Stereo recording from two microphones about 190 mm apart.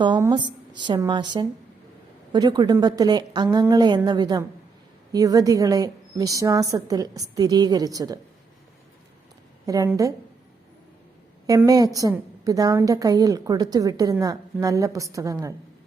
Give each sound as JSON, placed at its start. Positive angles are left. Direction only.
{"t": 0.0, "sound": "a woman's voice", "side_deg": -25}
{"t": 9.6, "sound": "a woman's voice", "side_deg": -15}
{"t": 11.4, "sound": "a woman's voice", "side_deg": -20}